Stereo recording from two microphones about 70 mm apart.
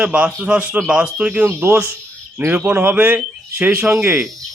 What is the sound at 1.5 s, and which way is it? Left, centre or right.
A man's voice, right.